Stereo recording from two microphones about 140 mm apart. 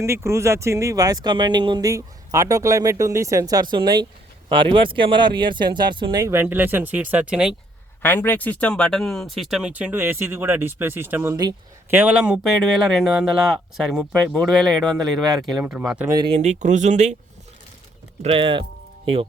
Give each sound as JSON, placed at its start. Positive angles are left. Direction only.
{"t": 0.0, "sound": "speech", "side_deg": -20}
{"t": 8.0, "sound": "speech", "side_deg": 15}
{"t": 11.9, "sound": "speech", "side_deg": -10}
{"t": 16.0, "sound": "speech", "side_deg": -30}
{"t": 16.3, "sound": "speech", "side_deg": -55}
{"t": 18.2, "sound": "speech", "side_deg": -40}